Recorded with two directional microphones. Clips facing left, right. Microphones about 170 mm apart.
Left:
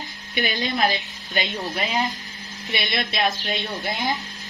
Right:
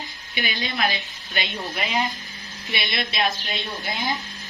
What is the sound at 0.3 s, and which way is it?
Speech, 50° left (ahead or behind).